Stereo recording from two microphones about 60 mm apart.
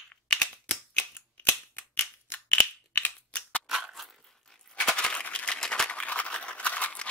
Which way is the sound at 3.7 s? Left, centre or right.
Centre.